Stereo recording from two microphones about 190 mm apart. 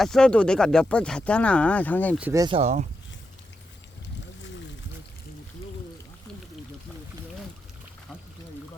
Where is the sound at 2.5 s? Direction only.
40° right (ahead or behind).